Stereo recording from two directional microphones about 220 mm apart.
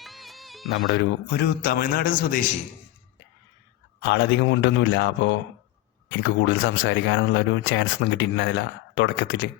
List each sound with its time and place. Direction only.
0.0 s music: centre (ahead or behind)
0.9 s a man's voice: 50° left (ahead or behind)
4.0 s speech: 55° left (ahead or behind)